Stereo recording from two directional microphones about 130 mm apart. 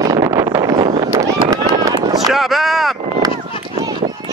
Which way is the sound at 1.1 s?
25° right (ahead or behind).